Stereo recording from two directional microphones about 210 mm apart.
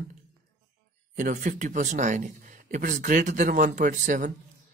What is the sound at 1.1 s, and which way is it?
A man's voice, 35° right (ahead or behind).